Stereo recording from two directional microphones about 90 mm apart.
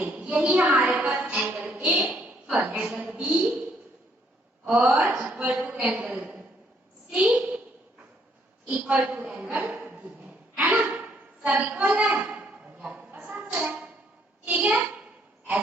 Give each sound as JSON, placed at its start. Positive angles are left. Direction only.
{"t": 0.0, "sound": "a sound", "side_deg": -10}
{"t": 0.4, "sound": "a woman's voice", "side_deg": -15}
{"t": 4.7, "sound": "a woman's voice", "side_deg": -15}
{"t": 8.6, "sound": "a woman's voice", "side_deg": -20}
{"t": 9.0, "sound": "a sound", "side_deg": -15}
{"t": 14.4, "sound": "a child's voice", "side_deg": -15}